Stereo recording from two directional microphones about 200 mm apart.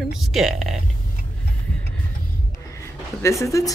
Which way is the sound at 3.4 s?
15° left (ahead or behind).